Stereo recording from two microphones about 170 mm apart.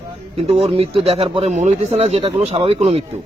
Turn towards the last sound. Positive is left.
turn(degrees=-35)  # may be behind; listen again after turning